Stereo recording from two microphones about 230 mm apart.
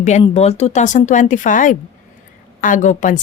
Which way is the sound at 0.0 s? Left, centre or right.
Left.